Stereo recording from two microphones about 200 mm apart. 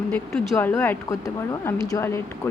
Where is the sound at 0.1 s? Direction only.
10° left (ahead or behind).